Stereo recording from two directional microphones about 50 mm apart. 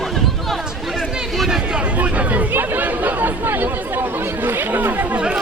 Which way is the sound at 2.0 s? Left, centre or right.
Right.